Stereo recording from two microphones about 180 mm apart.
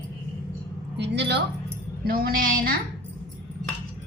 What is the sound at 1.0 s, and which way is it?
Child singing, 70° right (ahead or behind).